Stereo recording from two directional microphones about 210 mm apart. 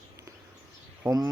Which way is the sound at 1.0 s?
15° right (ahead or behind).